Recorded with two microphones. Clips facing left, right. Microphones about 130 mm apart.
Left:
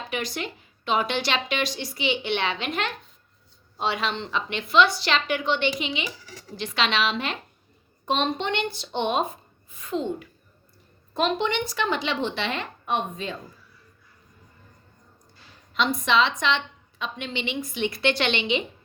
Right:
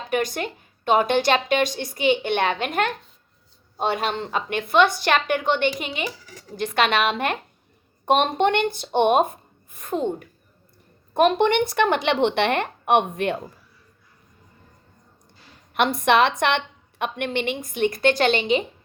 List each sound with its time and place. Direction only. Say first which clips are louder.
0.1 s a woman's voice: right 8 dB; 50° right (ahead or behind); by 13.4 s 65° right (ahead or behind)
15.7 s a woman's voice: right 4 dB; 65° right (ahead or behind); by 18.6 s 40° right (ahead or behind)